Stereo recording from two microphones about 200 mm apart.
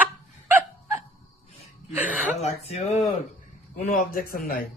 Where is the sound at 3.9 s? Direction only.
45° left (ahead or behind).